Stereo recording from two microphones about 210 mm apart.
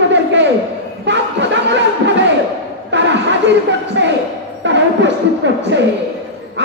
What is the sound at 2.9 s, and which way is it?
Chatter, 60° right (ahead or behind).